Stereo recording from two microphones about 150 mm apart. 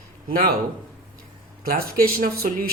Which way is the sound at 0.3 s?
75° right (ahead or behind).